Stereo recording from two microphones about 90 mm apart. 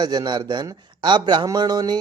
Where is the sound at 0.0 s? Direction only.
45° right (ahead or behind).